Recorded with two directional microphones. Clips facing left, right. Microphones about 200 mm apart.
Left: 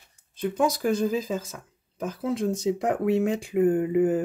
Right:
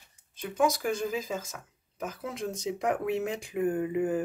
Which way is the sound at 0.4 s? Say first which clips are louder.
Left 3 dB; 35° left (ahead or behind).